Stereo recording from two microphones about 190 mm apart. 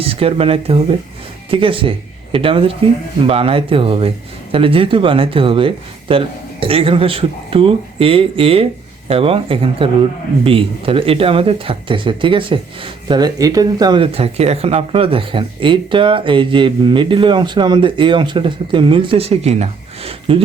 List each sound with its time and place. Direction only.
0.0 s speech: 30° right (ahead or behind)